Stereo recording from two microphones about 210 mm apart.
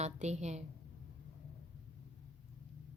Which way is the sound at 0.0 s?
30° right (ahead or behind).